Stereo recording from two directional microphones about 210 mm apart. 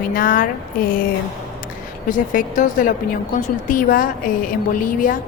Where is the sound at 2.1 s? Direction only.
40° left (ahead or behind).